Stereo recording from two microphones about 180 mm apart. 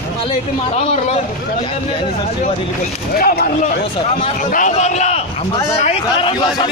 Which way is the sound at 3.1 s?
55° left (ahead or behind).